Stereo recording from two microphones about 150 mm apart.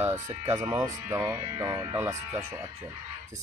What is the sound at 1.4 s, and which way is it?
Speech, 25° right (ahead or behind).